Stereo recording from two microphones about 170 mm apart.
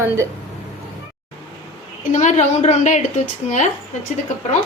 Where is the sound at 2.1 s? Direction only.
45° left (ahead or behind).